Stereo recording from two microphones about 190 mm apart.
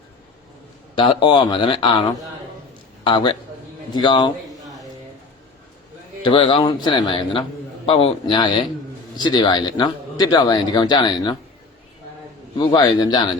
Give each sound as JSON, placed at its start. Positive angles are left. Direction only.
{"t": 0.9, "sound": "a man's voice", "side_deg": 25}
{"t": 6.2, "sound": "speech", "side_deg": 30}
{"t": 12.5, "sound": "speech", "side_deg": 25}